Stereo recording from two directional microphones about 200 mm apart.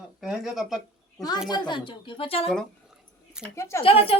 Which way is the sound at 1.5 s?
20° left (ahead or behind).